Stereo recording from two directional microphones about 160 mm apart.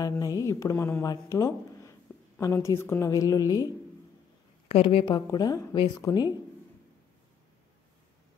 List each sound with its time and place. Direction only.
0.0 s speech: 20° left (ahead or behind)
4.6 s a woman's voice: 35° left (ahead or behind)